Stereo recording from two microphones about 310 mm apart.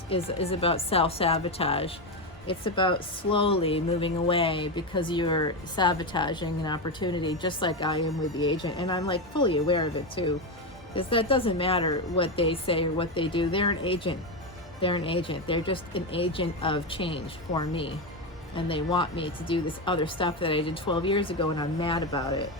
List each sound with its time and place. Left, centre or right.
0.1 s speech: centre